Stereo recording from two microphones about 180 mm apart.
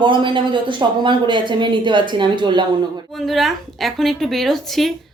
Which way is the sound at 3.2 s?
Centre (ahead or behind).